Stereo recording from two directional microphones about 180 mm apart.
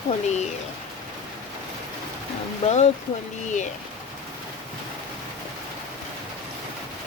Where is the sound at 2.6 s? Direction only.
35° left (ahead or behind).